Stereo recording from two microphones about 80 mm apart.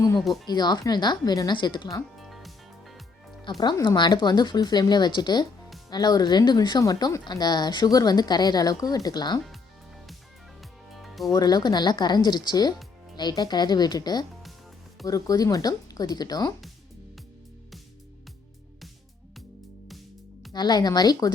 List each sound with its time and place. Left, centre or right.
0.2 s speech: centre
0.4 s a woman's voice: left
2.1 s music: centre
3.8 s a woman's voice: left
10.9 s music: centre
11.3 s a woman's voice: left
15.0 s speech: left
20.5 s a woman's voice: left